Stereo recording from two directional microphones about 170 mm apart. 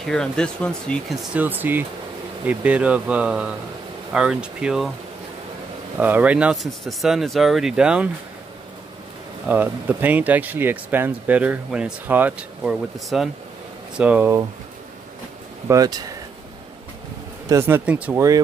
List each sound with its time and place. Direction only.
0.0 s speech: 5° left (ahead or behind)
5.9 s speech: 10° right (ahead or behind)
9.5 s speech: 10° right (ahead or behind)
15.7 s speech: 20° right (ahead or behind)
17.5 s speech: 15° right (ahead or behind)